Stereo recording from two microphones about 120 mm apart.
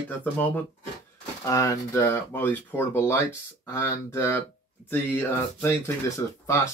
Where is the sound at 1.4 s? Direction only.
25° left (ahead or behind).